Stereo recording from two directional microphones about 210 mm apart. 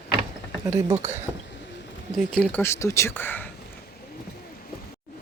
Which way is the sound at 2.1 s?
5° left (ahead or behind).